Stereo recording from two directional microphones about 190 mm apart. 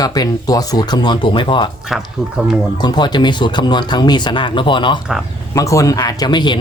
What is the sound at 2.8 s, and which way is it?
Speech, 25° left (ahead or behind).